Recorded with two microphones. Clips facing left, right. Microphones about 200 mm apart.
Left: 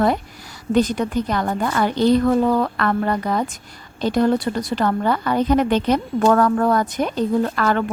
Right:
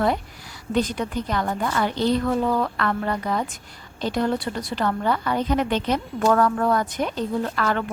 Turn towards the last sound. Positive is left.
turn(degrees=45)  # may be behind; listen again after turning